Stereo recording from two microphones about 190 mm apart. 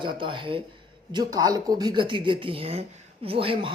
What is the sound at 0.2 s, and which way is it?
Speech, 25° right (ahead or behind).